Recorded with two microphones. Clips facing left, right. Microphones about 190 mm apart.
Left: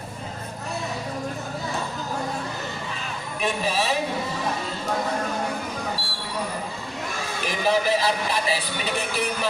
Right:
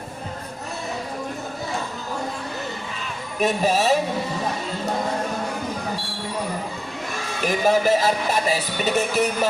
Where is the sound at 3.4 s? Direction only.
45° right (ahead or behind).